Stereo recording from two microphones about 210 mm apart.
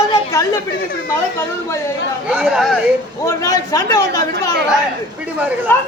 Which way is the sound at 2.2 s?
5° right (ahead or behind).